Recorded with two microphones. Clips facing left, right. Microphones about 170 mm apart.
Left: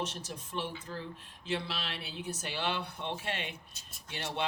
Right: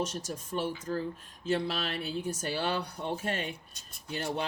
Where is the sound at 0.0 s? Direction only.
45° right (ahead or behind).